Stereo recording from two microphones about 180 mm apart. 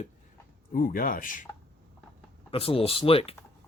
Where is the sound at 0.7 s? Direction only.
50° left (ahead or behind).